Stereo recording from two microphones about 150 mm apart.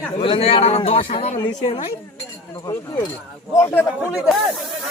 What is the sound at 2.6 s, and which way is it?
Speech, 25° left (ahead or behind).